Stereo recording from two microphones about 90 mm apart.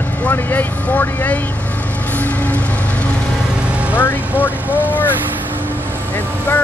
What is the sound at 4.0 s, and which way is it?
Vehicle, 20° left (ahead or behind).